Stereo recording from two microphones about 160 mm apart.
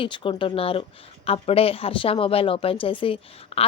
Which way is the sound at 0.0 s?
30° left (ahead or behind).